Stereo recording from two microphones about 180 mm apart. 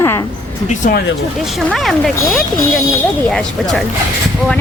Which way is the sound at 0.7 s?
45° left (ahead or behind).